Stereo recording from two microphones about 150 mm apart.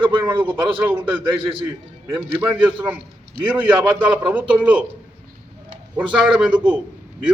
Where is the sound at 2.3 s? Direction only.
10° right (ahead or behind).